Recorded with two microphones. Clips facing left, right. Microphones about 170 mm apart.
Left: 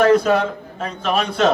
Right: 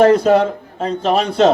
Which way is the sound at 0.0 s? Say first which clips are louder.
Right 4 dB; 30° right (ahead or behind).